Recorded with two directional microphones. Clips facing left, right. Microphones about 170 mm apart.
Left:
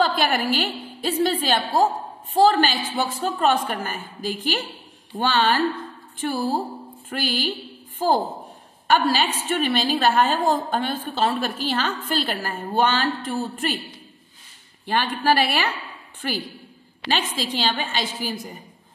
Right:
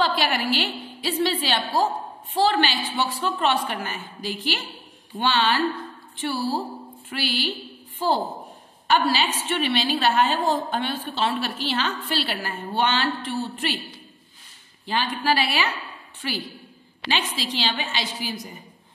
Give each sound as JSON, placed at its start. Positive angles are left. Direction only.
{"t": 0.0, "sound": "a woman's voice", "side_deg": 50}
{"t": 8.8, "sound": "a woman's voice", "side_deg": 50}
{"t": 14.9, "sound": "a woman's voice", "side_deg": 55}